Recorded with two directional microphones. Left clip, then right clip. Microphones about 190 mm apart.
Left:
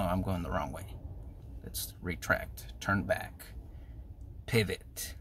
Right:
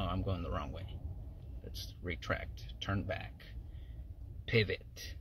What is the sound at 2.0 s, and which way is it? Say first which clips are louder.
Speech: left 7 dB; 20° left (ahead or behind).